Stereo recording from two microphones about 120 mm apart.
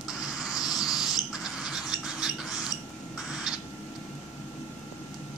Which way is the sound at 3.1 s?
5° right (ahead or behind).